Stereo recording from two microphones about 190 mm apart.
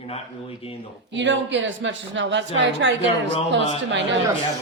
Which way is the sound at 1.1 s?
70° right (ahead or behind).